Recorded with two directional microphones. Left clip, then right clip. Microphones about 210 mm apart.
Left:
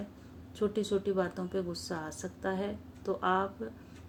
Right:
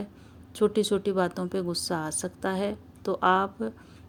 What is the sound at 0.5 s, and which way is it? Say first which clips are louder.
Speech: right 7 dB; 50° right (ahead or behind).